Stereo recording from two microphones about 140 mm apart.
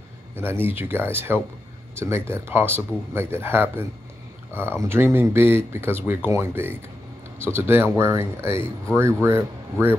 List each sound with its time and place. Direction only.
0.4 s speech: 15° right (ahead or behind)
4.8 s speech: 15° right (ahead or behind)